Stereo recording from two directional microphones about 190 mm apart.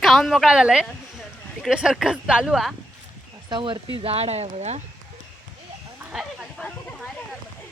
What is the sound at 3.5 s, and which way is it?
Speech, 25° right (ahead or behind).